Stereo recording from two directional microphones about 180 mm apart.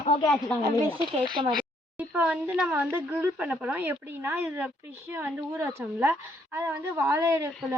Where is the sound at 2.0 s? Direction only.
5° right (ahead or behind).